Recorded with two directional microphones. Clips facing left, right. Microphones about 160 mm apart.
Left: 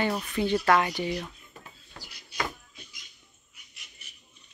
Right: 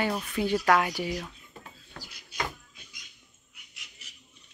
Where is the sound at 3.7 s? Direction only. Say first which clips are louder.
Right 1 dB; 90° right.